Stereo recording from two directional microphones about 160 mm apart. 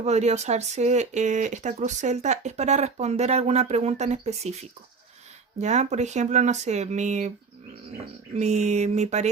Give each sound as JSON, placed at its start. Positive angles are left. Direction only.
{"t": 0.0, "sound": "speech", "side_deg": -45}
{"t": 5.5, "sound": "speech", "side_deg": -45}
{"t": 8.4, "sound": "speech", "side_deg": -45}